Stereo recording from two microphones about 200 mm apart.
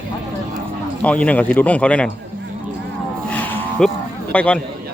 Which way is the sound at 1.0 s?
5° left (ahead or behind).